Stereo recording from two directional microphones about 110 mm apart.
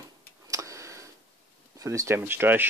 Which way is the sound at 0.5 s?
30° right (ahead or behind).